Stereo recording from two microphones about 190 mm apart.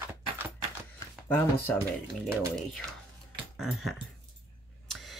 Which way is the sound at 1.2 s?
10° left (ahead or behind).